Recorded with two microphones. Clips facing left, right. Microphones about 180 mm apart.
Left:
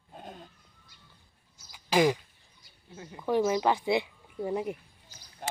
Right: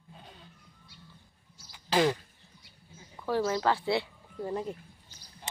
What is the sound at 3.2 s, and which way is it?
Speech, 15° left (ahead or behind).